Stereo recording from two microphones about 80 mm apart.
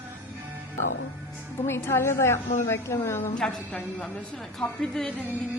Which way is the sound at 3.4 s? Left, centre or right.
Centre.